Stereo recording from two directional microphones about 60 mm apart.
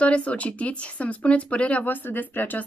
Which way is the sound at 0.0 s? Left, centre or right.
Left.